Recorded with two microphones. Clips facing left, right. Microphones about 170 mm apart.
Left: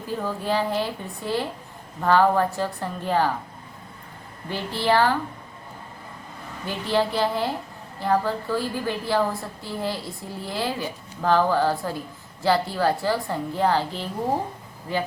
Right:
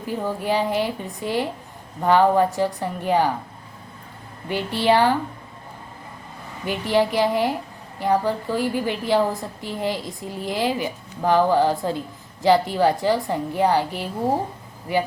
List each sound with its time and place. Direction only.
0.1 s a woman's voice: 15° right (ahead or behind)
4.4 s a woman's voice: 15° right (ahead or behind)
6.7 s a woman's voice: 15° right (ahead or behind)